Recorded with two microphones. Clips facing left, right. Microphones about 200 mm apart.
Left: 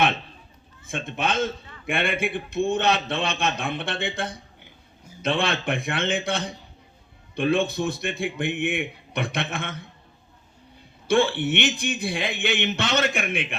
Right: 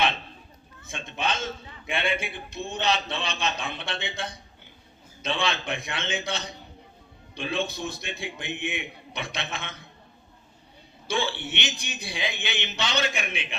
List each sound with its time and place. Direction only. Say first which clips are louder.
0.9 s a man's voice: left 3 dB; 55° left (ahead or behind)
11.1 s a man's voice: left 8 dB; 55° left (ahead or behind)